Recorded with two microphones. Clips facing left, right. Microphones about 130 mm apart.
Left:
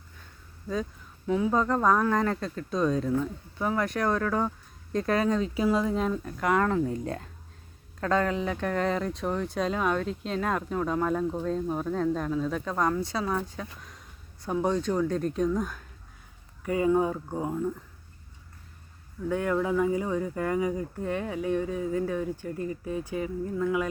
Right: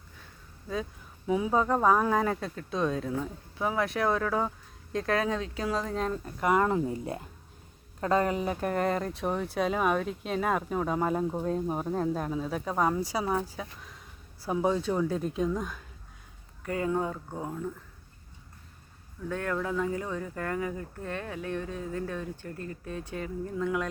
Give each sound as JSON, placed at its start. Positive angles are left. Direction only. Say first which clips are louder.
{"t": 1.3, "sound": "speech", "louder": "left 1 dB", "side_deg": -15}
{"t": 6.2, "sound": "speech", "louder": "right 3 dB", "side_deg": -10}
{"t": 19.3, "sound": "speech", "louder": "left 5 dB", "side_deg": 10}